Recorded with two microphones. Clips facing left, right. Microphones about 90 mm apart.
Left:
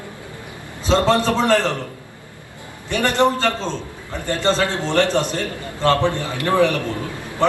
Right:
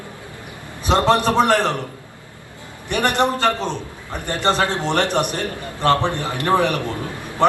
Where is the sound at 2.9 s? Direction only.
20° right (ahead or behind).